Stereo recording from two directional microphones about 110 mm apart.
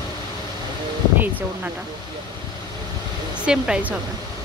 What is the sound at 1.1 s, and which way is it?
Speech, 15° right (ahead or behind).